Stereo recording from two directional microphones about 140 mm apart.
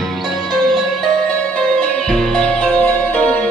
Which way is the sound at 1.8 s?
5° left (ahead or behind).